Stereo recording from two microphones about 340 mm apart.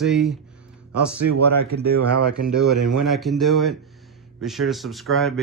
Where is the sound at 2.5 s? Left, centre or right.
Centre.